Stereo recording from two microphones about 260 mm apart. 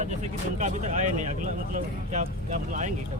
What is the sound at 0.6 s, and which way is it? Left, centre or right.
Speech, right.